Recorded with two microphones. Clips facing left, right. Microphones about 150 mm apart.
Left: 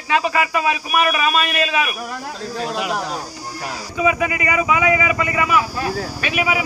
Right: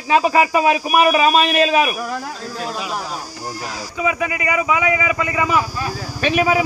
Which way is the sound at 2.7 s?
70° left (ahead or behind).